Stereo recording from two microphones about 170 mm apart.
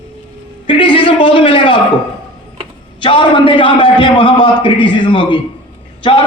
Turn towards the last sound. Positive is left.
turn(degrees=30)  # may be behind; listen again after turning